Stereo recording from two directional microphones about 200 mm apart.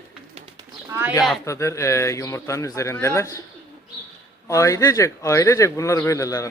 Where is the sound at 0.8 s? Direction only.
10° right (ahead or behind).